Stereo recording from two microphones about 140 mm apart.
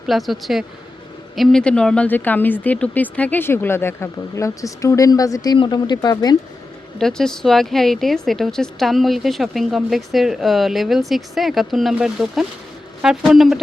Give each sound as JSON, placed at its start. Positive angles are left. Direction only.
{"t": 0.1, "sound": "speech", "side_deg": 0}
{"t": 7.0, "sound": "speech", "side_deg": 5}